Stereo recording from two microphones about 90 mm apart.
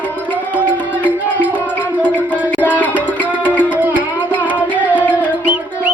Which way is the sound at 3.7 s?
20° right (ahead or behind).